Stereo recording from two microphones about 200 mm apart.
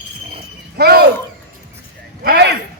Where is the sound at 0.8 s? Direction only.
50° right (ahead or behind).